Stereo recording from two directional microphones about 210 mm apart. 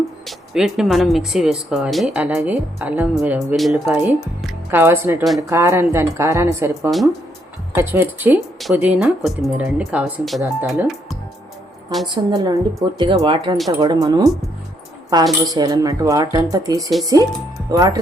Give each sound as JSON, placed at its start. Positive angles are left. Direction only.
{"t": 0.3, "sound": "speech", "side_deg": 0}
{"t": 12.0, "sound": "speech", "side_deg": -20}